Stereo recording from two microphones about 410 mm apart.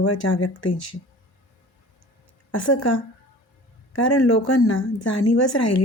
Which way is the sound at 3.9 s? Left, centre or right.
Left.